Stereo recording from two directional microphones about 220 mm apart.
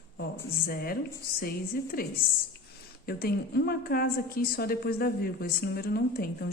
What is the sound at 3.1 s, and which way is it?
A woman's voice, 45° left (ahead or behind).